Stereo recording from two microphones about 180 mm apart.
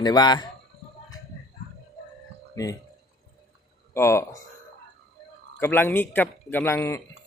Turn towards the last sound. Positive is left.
turn(degrees=15)  # may be behind; listen again after turning